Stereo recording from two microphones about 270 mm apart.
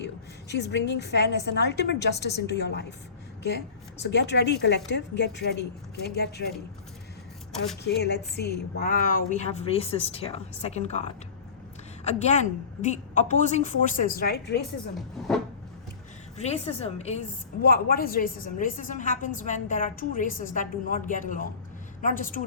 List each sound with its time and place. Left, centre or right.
0.0 s a woman's voice: left
4.0 s a woman's voice: left
7.9 s a woman's voice: left
16.4 s a woman's voice: left